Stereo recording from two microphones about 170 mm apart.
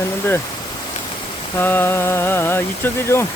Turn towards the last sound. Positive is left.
turn(degrees=15)  # may be behind; listen again after turning